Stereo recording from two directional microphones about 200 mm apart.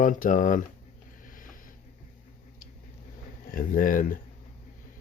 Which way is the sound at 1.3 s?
45° left (ahead or behind).